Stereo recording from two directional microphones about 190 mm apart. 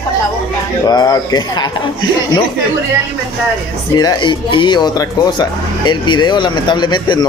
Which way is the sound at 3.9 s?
20° left (ahead or behind).